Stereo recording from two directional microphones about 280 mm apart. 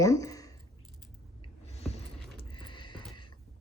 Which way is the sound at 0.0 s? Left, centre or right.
Centre.